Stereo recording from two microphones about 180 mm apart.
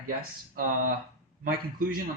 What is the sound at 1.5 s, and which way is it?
Speech, 55° right (ahead or behind).